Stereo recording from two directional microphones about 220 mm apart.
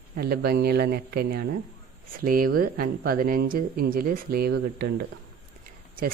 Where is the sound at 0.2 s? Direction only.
45° right (ahead or behind).